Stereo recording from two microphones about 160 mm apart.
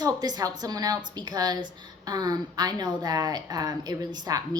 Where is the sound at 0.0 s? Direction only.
25° right (ahead or behind).